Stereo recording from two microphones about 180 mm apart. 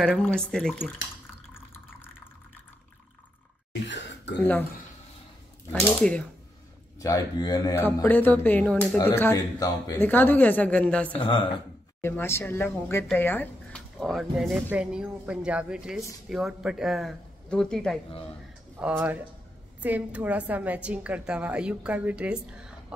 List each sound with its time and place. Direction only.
0.2 s speech: 5° left (ahead or behind)
3.8 s a sound: 75° left (ahead or behind)
4.4 s speech: 10° left (ahead or behind)
5.7 s speech: 5° left (ahead or behind)
7.0 s speech: 20° left (ahead or behind); by 17.9 s 5° left (ahead or behind)
18.8 s a woman's voice: 10° right (ahead or behind)